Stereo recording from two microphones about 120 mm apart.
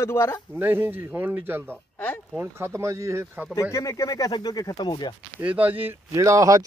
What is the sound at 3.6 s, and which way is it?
Speech, 25° left (ahead or behind).